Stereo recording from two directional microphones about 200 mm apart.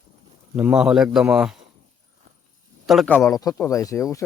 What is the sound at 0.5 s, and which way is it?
Speech, 5° right (ahead or behind).